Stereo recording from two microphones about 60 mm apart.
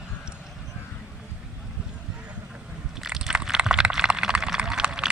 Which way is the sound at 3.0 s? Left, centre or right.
Centre.